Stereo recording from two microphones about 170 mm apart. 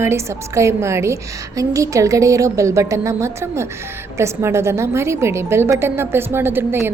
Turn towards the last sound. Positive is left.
turn(degrees=-15)  # may be behind; listen again after turning